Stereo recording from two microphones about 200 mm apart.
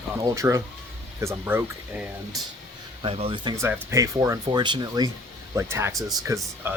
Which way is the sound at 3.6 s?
15° right (ahead or behind).